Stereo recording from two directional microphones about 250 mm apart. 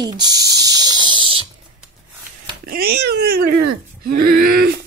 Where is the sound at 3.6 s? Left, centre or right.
Right.